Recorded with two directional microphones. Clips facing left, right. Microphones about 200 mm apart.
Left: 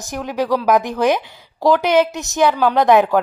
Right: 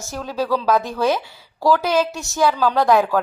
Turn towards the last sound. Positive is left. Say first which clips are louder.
# left 3 dB
turn(degrees=20)  # may be behind; listen again after turning